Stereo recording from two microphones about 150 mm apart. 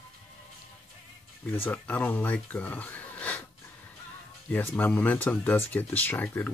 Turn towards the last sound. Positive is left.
turn(degrees=10)  # may be behind; listen again after turning